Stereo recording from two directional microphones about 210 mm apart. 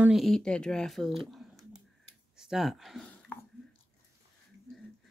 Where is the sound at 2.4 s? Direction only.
Centre (ahead or behind).